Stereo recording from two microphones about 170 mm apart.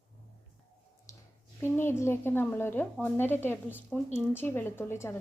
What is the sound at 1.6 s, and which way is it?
A woman's voice, 15° left (ahead or behind).